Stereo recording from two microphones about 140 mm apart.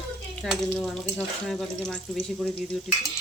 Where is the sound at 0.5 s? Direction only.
Centre (ahead or behind).